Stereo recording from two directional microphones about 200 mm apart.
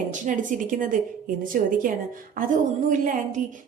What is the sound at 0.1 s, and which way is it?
A woman's voice, 40° right (ahead or behind).